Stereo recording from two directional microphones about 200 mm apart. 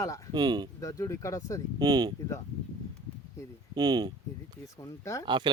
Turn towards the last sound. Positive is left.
turn(degrees=-20)  # may be behind; listen again after turning